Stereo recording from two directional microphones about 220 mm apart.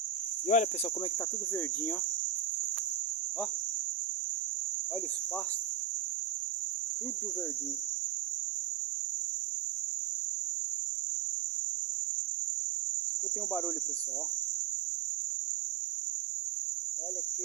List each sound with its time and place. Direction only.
0.4 s cricket: 35° left (ahead or behind)